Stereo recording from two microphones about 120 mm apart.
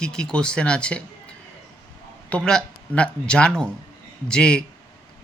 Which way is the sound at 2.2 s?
10° left (ahead or behind).